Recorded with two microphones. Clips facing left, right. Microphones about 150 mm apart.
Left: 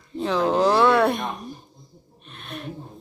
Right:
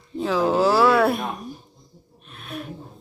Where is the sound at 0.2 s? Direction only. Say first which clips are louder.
Right 1 dB; 5° right (ahead or behind).